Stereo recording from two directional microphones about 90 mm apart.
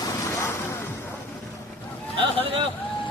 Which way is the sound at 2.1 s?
85° right.